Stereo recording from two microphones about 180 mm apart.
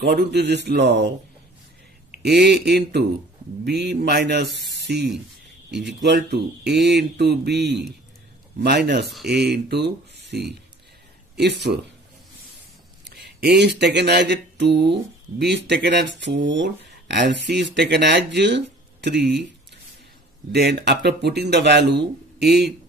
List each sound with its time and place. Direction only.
0.0 s speech: 70° right (ahead or behind)
5.7 s speech: 70° right (ahead or behind)
9.0 s speech: centre (ahead or behind)
9.3 s speech: 65° right (ahead or behind)
13.1 s a sound: 60° right (ahead or behind); by 17.2 s 75° right (ahead or behind)
17.5 s speech: 75° right (ahead or behind)
20.5 s speech: 65° right (ahead or behind)